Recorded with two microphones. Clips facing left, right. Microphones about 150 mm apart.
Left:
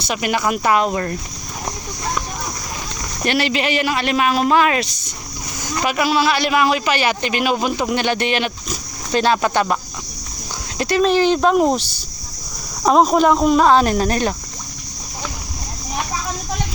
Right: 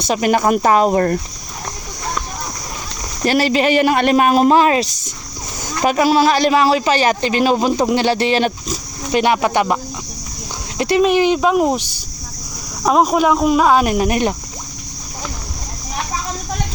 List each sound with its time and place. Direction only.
0.1 s speech: 40° right (ahead or behind)
3.2 s speech: 40° right (ahead or behind)
9.1 s speech: 15° right (ahead or behind)
10.8 s a sound: 25° right (ahead or behind)
11.0 s speech: 10° right (ahead or behind)